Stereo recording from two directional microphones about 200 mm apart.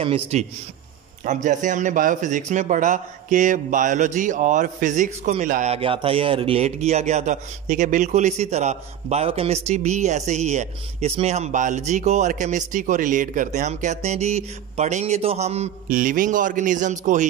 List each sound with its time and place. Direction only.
0.0 s a man's voice: 30° right (ahead or behind)